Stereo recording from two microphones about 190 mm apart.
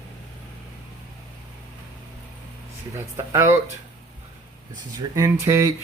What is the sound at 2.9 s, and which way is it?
Speech, 15° right (ahead or behind).